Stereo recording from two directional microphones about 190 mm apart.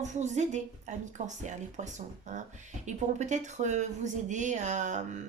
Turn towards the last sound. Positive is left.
turn(degrees=-40)  # may be behind; listen again after turning